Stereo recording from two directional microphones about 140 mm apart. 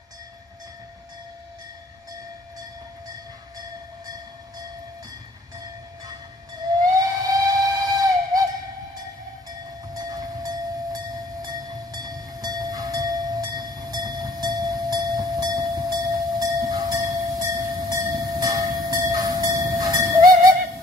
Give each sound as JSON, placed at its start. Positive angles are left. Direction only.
{"t": 6.8, "sound": "steam whistle", "side_deg": -25}
{"t": 9.9, "sound": "train", "side_deg": -30}